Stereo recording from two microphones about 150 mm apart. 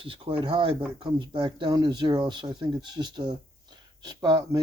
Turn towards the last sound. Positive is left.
turn(degrees=-25)  # may be behind; listen again after turning